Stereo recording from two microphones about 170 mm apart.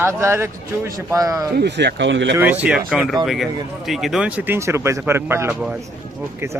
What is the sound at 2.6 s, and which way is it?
Speech, 5° right (ahead or behind).